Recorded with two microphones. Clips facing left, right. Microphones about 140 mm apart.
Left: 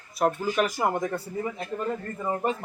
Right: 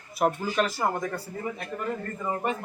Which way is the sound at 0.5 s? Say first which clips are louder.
Left 1 dB; 10° left (ahead or behind).